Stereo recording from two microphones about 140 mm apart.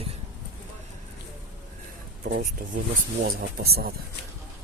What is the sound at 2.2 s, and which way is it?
Speech, 75° right (ahead or behind).